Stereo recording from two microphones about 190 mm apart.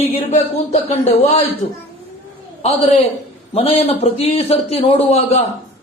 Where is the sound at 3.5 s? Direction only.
35° left (ahead or behind).